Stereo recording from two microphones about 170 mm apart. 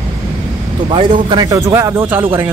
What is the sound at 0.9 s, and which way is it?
A man's voice, 30° right (ahead or behind).